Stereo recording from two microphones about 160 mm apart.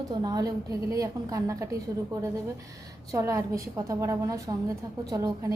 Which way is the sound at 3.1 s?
20° right (ahead or behind).